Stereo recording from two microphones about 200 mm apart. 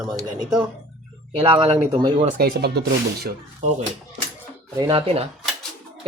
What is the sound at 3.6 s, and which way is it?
Speech, 35° right (ahead or behind).